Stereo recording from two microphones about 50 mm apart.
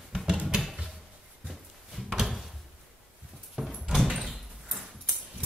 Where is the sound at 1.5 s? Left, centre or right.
Centre.